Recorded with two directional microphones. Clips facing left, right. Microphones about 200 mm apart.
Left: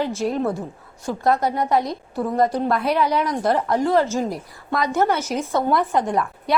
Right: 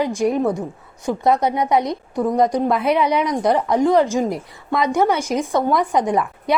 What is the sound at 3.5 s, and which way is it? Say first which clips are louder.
Speech: right 2 dB; centre (ahead or behind).